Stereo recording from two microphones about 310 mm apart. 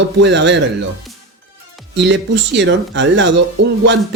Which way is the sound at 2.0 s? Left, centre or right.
Right.